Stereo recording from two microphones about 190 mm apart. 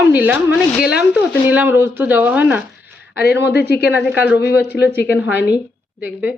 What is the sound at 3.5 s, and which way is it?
Speech, 60° left (ahead or behind).